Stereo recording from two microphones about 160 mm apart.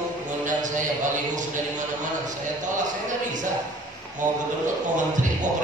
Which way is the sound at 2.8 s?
50° right (ahead or behind).